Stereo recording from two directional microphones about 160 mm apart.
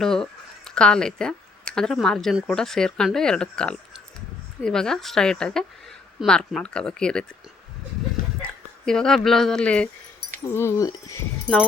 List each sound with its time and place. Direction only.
0.0 s speech: 5° left (ahead or behind)
8.9 s speech: 5° left (ahead or behind); by 11.2 s 20° left (ahead or behind)